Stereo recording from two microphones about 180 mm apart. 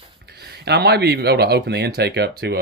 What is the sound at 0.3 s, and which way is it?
Speech, 65° right (ahead or behind).